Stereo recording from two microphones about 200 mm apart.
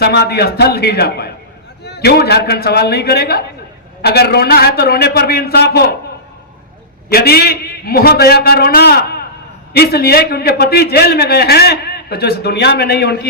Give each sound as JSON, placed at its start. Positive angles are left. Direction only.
{"t": 0.0, "sound": "a man's voice", "side_deg": 55}
{"t": 7.1, "sound": "a man's voice", "side_deg": 50}